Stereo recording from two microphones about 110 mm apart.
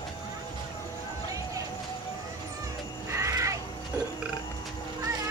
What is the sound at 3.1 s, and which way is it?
Cat, 25° right (ahead or behind).